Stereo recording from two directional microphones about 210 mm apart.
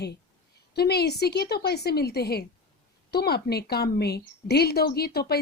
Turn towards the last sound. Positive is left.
turn(degrees=50)  # may be behind; listen again after turning